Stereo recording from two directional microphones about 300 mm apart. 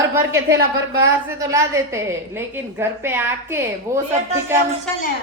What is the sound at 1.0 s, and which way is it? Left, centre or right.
A woman's voice, centre.